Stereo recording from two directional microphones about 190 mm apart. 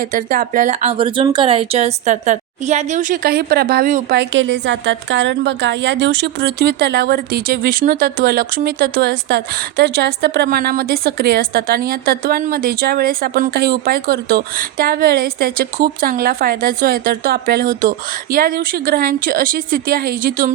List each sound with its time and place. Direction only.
0.0 s speech: 45° right (ahead or behind)